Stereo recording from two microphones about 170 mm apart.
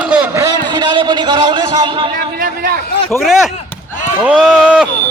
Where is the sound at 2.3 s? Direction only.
60° right (ahead or behind).